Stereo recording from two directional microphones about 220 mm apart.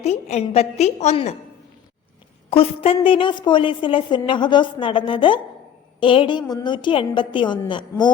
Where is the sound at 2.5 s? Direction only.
25° left (ahead or behind).